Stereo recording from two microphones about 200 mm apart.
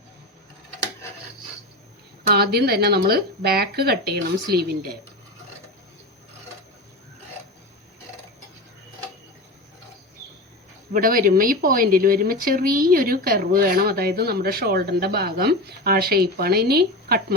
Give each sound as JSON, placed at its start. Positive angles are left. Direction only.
{"t": 2.3, "sound": "speech", "side_deg": -50}
{"t": 10.9, "sound": "speech", "side_deg": -45}